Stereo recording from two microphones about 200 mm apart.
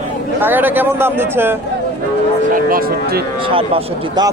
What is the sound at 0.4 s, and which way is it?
A man's voice, 10° right (ahead or behind).